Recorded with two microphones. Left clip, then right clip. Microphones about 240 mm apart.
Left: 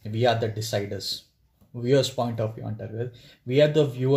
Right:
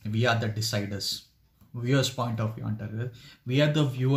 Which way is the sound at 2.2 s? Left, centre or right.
Right.